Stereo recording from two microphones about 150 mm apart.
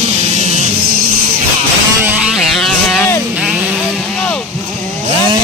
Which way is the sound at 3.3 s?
10° right (ahead or behind).